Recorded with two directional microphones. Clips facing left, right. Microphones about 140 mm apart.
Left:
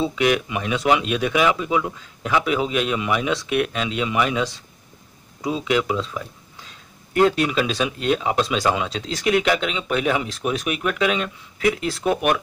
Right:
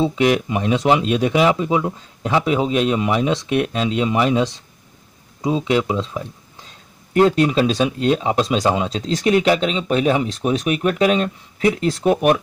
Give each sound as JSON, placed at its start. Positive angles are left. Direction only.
{"t": 0.0, "sound": "speech", "side_deg": -30}